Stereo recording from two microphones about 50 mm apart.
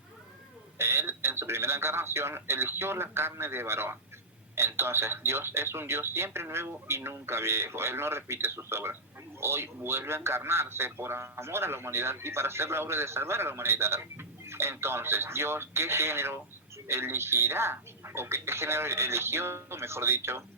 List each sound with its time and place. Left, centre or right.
0.8 s a man's voice: right